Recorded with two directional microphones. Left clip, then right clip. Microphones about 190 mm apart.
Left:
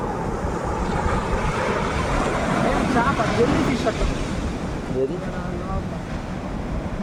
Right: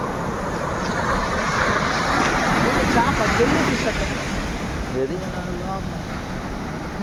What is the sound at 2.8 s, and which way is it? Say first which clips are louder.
Vehicle: right 2 dB; 55° left (ahead or behind).